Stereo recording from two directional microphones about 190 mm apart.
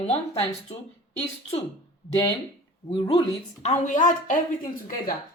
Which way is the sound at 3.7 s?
40° left (ahead or behind).